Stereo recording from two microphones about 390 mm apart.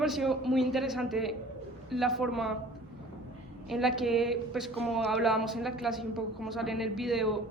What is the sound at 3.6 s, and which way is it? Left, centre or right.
Speech, centre.